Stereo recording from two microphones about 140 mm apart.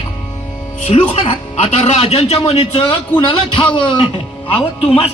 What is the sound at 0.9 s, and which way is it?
Speech, 40° left (ahead or behind).